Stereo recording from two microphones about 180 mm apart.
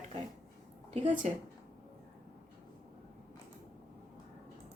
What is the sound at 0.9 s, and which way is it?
Speech, 40° right (ahead or behind).